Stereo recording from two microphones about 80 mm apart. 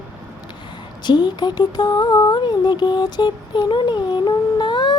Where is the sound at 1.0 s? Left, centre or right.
Left.